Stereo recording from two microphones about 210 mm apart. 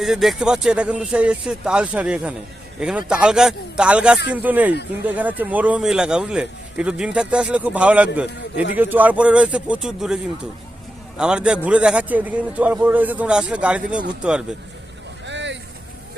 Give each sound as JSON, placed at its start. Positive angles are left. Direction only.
{"t": 0.0, "sound": "a man's voice", "side_deg": 0}
{"t": 11.2, "sound": "a man's voice", "side_deg": -5}
{"t": 15.3, "sound": "vehicle", "side_deg": -60}